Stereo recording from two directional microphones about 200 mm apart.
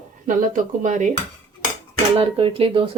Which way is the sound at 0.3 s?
40° right (ahead or behind).